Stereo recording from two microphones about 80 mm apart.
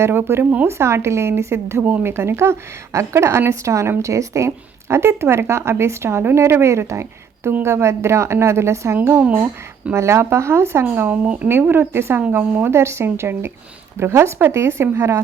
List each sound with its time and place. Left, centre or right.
0.0 s speech: right
9.0 s a woman's voice: right